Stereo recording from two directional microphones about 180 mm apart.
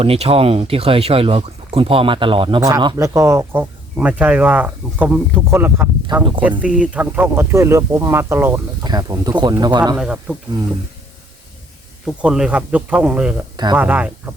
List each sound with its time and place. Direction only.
0.0 s speech: 30° right (ahead or behind)
10.0 s speech: 5° right (ahead or behind)
12.0 s speech: 5° right (ahead or behind)